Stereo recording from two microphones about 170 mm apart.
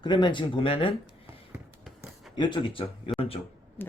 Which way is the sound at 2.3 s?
25° left (ahead or behind).